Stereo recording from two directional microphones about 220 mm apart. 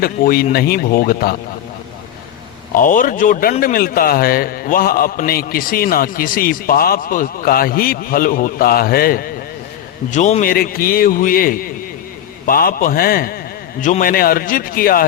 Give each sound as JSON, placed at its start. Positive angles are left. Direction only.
{"t": 0.0, "sound": "speech", "side_deg": 40}
{"t": 2.7, "sound": "a man's voice", "side_deg": 40}